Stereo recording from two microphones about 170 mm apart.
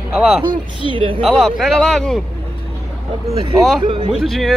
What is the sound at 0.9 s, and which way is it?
Speech, 30° right (ahead or behind).